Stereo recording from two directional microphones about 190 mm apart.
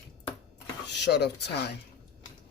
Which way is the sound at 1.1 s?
60° left (ahead or behind).